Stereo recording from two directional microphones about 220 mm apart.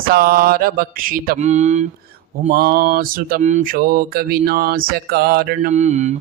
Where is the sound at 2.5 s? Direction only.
45° right (ahead or behind).